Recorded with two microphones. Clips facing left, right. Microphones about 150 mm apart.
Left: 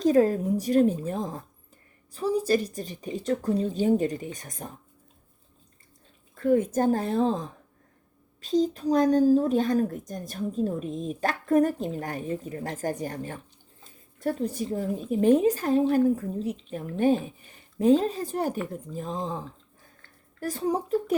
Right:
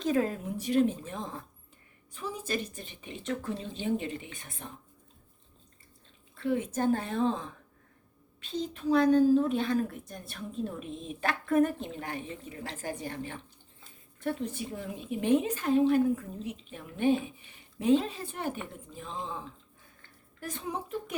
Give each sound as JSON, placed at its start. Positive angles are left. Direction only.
{"t": 0.0, "sound": "a woman's voice", "side_deg": 40}
{"t": 6.3, "sound": "a woman's voice", "side_deg": 45}